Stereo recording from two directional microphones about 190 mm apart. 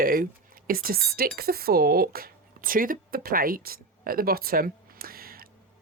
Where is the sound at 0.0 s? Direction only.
50° right (ahead or behind).